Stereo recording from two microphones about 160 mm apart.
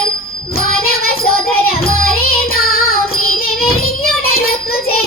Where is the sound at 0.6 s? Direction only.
70° left (ahead or behind).